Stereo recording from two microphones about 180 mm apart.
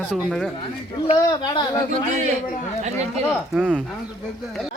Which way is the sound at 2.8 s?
40° right (ahead or behind).